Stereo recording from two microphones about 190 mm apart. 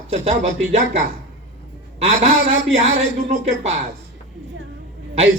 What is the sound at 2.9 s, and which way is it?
Speech, 35° right (ahead or behind).